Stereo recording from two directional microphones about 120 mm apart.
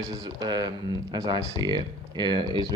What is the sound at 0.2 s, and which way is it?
Speech, 35° right (ahead or behind).